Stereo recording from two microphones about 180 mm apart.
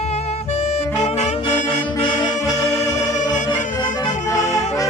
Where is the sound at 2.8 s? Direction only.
15° left (ahead or behind).